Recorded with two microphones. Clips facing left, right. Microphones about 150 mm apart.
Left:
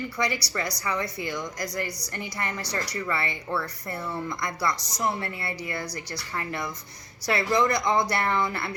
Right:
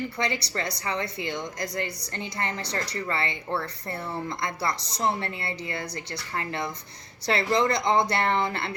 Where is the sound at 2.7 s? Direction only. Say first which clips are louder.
Even; 25° right (ahead or behind).